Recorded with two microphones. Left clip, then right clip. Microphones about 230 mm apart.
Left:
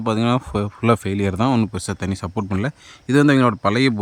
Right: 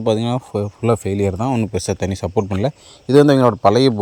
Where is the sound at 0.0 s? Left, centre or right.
Centre.